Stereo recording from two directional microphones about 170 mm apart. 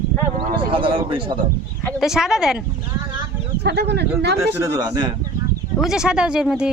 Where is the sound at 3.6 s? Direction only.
80° right.